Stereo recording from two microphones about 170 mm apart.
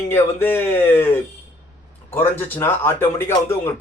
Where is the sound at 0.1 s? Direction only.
15° left (ahead or behind).